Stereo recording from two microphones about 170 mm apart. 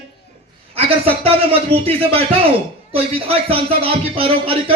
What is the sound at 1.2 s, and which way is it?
A man's voice, 35° right (ahead or behind).